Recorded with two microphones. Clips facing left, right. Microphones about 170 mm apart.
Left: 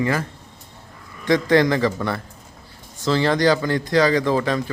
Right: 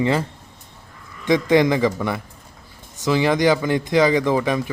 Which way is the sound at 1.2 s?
20° right (ahead or behind).